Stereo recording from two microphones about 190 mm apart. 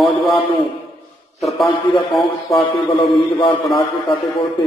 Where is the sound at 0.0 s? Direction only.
Centre (ahead or behind).